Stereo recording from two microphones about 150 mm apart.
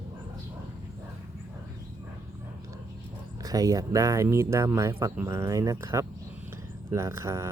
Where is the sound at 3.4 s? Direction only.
25° right (ahead or behind).